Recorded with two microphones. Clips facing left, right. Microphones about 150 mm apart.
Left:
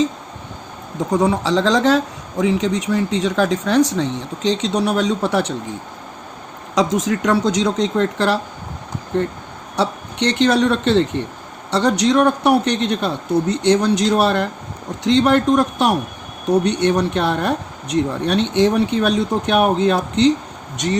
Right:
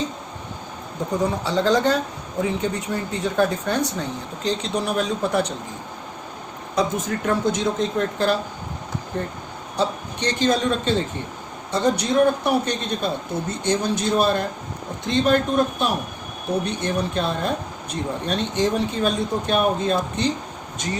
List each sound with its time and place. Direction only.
1.1 s speech: 90° left
4.4 s speech: 80° left
6.7 s speech: 90° left
9.7 s speech: 70° left (ahead or behind)
16.5 s speech: 75° left (ahead or behind)